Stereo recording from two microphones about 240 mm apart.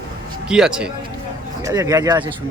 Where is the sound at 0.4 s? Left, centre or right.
Centre.